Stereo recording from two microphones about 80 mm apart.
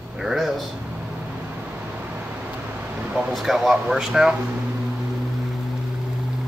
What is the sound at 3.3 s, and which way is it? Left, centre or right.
Speech, centre.